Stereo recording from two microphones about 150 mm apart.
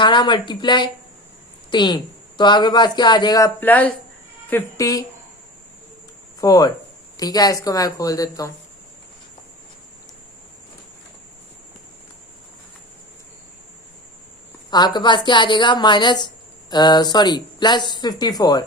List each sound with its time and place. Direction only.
0.0 s a woman's voice: 30° left (ahead or behind)
3.6 s a woman's voice: 10° left (ahead or behind)
6.4 s a woman's voice: 25° left (ahead or behind)
14.7 s a woman's voice: 30° left (ahead or behind)